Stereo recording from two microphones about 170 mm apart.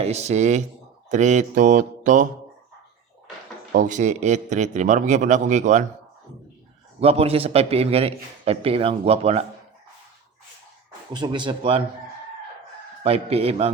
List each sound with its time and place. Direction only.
0.0 s a man's voice: 40° right (ahead or behind)
3.7 s speech: 45° right (ahead or behind)
7.0 s a man's voice: 35° right (ahead or behind)
11.1 s speech: 25° right (ahead or behind)
13.0 s a man's voice: 35° right (ahead or behind)